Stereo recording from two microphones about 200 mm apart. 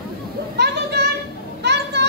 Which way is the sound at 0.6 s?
55° right (ahead or behind).